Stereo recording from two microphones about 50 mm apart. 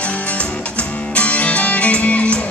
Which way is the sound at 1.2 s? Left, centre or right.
Left.